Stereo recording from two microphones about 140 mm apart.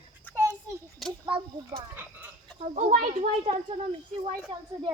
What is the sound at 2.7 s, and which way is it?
Speech, 65° right (ahead or behind).